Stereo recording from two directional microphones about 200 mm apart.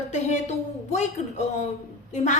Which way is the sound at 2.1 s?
35° left (ahead or behind).